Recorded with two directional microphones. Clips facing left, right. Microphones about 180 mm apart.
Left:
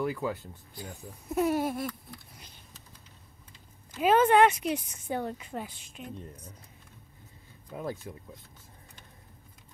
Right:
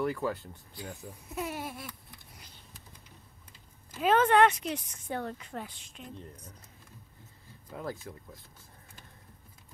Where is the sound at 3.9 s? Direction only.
10° left (ahead or behind).